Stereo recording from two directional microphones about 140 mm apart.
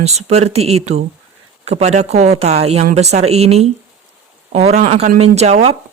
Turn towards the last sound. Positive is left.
turn(degrees=-50)  # may be behind; listen again after turning